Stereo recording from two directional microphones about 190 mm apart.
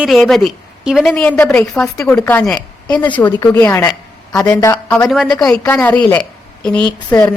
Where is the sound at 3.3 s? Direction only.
20° left (ahead or behind).